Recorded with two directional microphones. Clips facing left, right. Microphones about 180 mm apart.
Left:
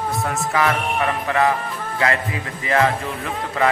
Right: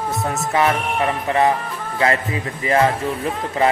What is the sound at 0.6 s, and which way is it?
Speech, 25° right (ahead or behind).